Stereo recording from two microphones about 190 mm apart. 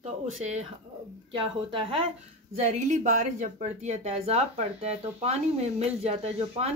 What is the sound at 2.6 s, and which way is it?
Speech, 40° right (ahead or behind).